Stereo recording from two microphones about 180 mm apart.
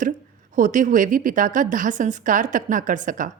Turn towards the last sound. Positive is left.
turn(degrees=-45)  # may be behind; listen again after turning